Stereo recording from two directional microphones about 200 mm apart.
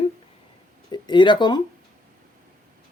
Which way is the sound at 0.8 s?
20° left (ahead or behind).